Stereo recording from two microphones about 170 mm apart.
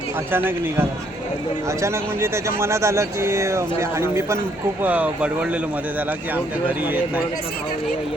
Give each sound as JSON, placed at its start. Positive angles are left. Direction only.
{"t": 0.3, "sound": "speech", "side_deg": -15}